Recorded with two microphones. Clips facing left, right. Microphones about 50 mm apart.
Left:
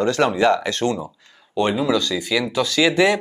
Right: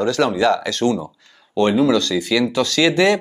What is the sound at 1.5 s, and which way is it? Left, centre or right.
Speech, centre.